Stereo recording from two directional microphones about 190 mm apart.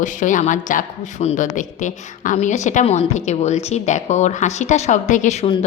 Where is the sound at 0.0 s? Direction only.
40° left (ahead or behind).